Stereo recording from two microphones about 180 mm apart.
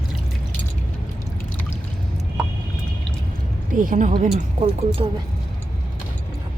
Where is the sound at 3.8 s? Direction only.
45° right (ahead or behind).